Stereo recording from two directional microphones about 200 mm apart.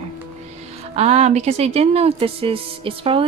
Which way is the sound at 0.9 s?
35° right (ahead or behind).